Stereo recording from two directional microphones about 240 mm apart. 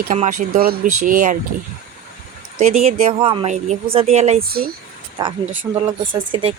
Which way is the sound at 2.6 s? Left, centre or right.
Right.